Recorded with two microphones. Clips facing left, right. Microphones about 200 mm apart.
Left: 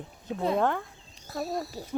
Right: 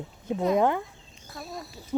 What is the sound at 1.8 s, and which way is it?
Speech, 35° left (ahead or behind).